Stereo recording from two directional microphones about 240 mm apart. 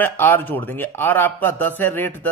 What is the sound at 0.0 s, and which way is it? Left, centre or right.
Speech, centre.